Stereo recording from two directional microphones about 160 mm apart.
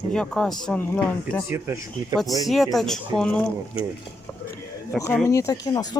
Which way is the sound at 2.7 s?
Centre (ahead or behind).